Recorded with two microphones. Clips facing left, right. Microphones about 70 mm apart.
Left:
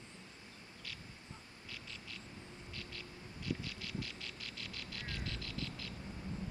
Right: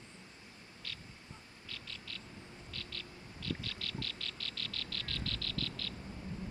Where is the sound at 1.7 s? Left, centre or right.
Centre.